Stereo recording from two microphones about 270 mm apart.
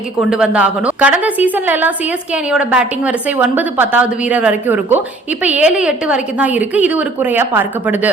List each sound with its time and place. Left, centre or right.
0.2 s a woman's voice: centre